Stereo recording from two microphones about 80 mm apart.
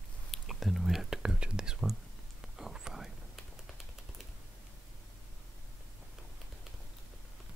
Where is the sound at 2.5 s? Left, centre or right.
Centre.